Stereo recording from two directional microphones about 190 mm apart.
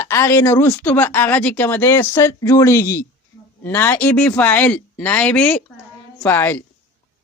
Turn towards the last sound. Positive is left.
turn(degrees=10)  # may be behind; listen again after turning